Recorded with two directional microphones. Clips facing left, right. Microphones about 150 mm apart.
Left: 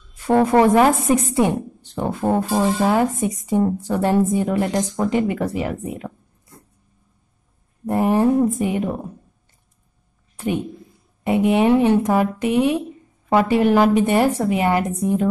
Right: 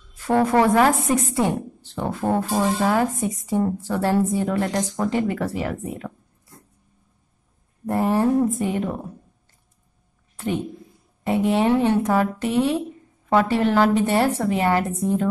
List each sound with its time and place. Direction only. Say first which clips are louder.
0.3 s a woman's voice: left 3 dB; 20° left (ahead or behind)
7.8 s a woman's voice: left 3 dB; 15° left (ahead or behind)
10.3 s a woman's voice: left 2 dB; 15° left (ahead or behind)